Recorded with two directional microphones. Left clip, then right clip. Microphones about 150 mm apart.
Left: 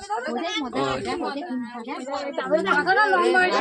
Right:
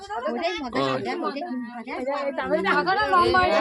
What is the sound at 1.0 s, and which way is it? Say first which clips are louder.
Speech: even; centre (ahead or behind).